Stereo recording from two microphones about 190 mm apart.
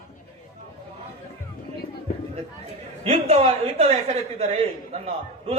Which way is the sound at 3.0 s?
35° right (ahead or behind).